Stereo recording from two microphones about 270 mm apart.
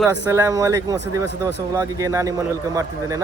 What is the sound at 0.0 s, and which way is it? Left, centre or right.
Speech, centre.